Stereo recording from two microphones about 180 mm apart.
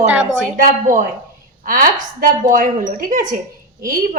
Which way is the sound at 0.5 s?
45° right (ahead or behind).